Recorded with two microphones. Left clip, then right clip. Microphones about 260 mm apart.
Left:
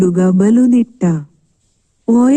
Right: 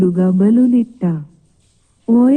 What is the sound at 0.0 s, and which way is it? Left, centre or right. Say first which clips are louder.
Speech: left 2 dB; left.